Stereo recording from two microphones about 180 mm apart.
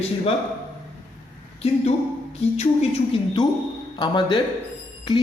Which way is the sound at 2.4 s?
35° left (ahead or behind).